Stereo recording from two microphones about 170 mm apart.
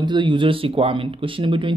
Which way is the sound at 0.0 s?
25° right (ahead or behind).